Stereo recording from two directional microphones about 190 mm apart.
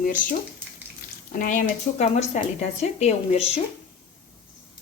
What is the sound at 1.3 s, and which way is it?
A woman's voice, 45° left (ahead or behind).